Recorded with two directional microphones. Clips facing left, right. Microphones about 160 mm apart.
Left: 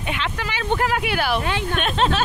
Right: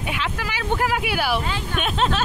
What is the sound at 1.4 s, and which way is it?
Speech, 65° left (ahead or behind).